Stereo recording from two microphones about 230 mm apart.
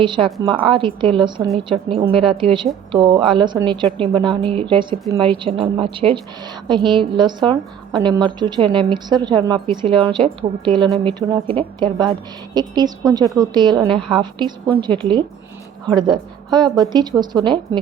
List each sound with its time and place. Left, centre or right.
0.0 s a woman's voice: right